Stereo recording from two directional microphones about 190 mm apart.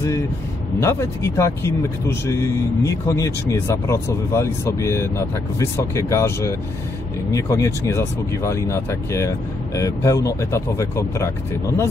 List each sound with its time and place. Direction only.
0.7 s speech: 15° left (ahead or behind)